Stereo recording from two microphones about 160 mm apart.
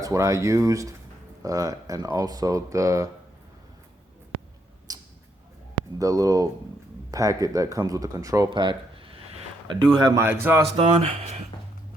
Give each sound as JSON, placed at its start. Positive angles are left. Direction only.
{"t": 0.0, "sound": "speech", "side_deg": -20}
{"t": 4.9, "sound": "a sound", "side_deg": -25}
{"t": 6.0, "sound": "speech", "side_deg": -20}
{"t": 10.8, "sound": "speech", "side_deg": -35}